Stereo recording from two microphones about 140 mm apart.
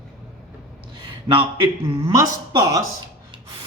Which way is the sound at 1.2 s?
40° right (ahead or behind).